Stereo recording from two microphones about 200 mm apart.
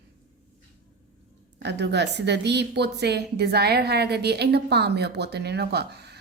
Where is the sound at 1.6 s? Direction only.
60° right (ahead or behind).